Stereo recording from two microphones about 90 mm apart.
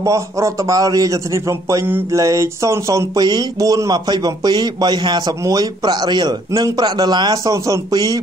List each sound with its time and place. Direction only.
0.0 s a man's voice: 35° right (ahead or behind)
3.2 s a man's voice: 50° right (ahead or behind)
5.4 s a man's voice: 45° right (ahead or behind)
7.5 s a man's voice: 35° right (ahead or behind)